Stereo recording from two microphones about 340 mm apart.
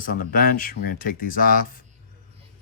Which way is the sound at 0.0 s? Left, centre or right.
Left.